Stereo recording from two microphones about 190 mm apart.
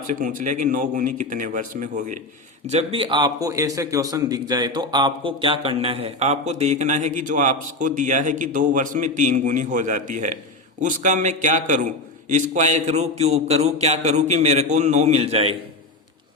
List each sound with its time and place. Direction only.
0.1 s a man's voice: 45° right (ahead or behind)
2.6 s a man's voice: 30° right (ahead or behind)